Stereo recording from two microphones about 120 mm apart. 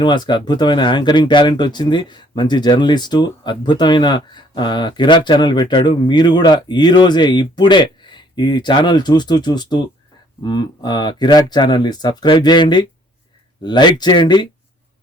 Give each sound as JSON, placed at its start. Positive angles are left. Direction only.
{"t": 0.0, "sound": "speech", "side_deg": 40}